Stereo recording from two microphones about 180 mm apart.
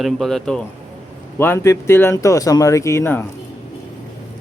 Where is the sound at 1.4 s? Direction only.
15° left (ahead or behind).